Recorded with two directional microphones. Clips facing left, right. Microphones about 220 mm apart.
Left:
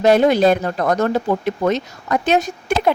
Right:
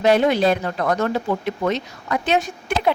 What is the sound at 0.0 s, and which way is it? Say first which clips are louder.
A woman's voice: left 3 dB; 45° left (ahead or behind).